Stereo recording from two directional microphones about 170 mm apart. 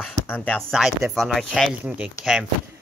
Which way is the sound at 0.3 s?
10° left (ahead or behind).